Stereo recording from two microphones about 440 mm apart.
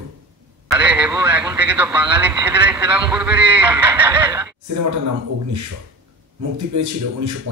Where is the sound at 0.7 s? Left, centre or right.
Centre.